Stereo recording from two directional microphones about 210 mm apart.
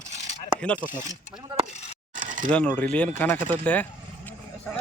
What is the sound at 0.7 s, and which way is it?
Speech, 10° right (ahead or behind).